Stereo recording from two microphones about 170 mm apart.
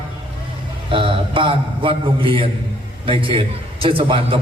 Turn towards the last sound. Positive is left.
turn(degrees=-30)  # may be behind; listen again after turning